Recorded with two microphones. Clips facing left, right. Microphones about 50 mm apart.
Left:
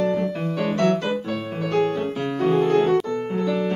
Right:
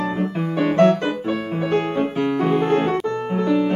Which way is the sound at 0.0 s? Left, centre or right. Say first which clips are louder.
Left 1 dB; right.